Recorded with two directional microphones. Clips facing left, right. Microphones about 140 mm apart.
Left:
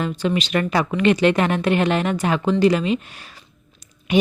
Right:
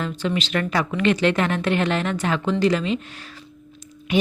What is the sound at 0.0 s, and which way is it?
A woman's voice, 15° left (ahead or behind).